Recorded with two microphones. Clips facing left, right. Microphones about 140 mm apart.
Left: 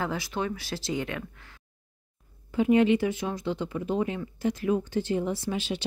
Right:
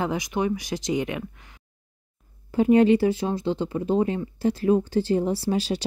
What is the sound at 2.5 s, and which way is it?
Speech, 40° right (ahead or behind).